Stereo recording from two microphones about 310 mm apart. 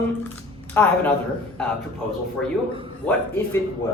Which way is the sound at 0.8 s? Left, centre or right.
Centre.